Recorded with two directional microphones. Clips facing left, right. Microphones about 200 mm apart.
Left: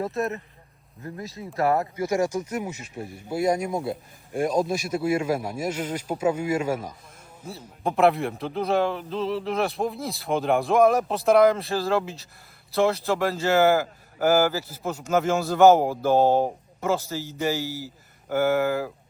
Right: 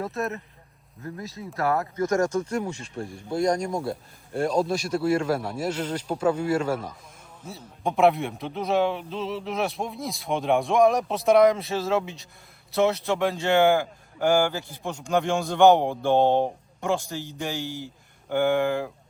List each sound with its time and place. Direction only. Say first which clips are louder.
0.0 s a man's voice: left 2 dB; centre (ahead or behind)